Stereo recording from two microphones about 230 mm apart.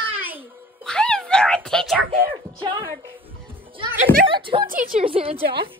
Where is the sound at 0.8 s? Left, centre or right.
Centre.